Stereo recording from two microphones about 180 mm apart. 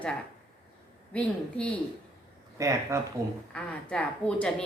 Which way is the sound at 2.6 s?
15° right (ahead or behind).